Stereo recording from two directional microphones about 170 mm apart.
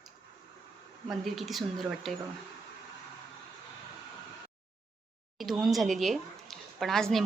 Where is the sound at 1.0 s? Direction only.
Centre (ahead or behind).